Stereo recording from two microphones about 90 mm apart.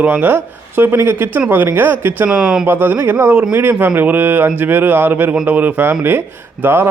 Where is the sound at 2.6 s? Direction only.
25° right (ahead or behind).